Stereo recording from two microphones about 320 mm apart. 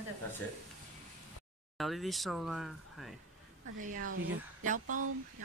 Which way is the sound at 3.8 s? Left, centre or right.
Right.